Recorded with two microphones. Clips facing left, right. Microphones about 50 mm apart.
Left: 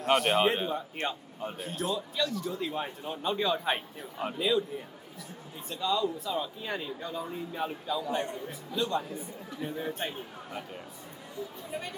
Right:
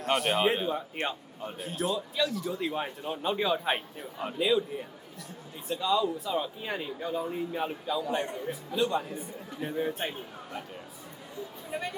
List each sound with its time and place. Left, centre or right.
0.0 s speech: centre
1.4 s speech: centre
5.6 s a man's voice: centre; by 8.5 s right
8.7 s speech: centre